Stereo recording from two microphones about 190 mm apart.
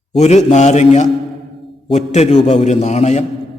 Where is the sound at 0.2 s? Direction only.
35° left (ahead or behind).